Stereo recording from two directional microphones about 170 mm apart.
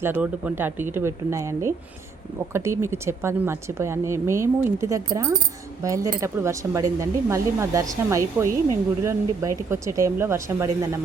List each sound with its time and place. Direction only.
0.0 s speech: 10° right (ahead or behind)